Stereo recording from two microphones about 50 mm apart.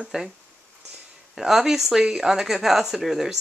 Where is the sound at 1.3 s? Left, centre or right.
Centre.